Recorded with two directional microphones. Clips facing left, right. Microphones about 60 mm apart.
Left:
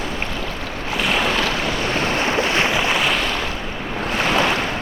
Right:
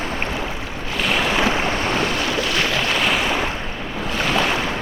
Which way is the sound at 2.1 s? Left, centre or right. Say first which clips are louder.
Left 2 dB; left.